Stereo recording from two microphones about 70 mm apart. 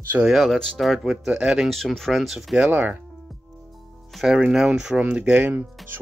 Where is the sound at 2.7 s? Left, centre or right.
Right.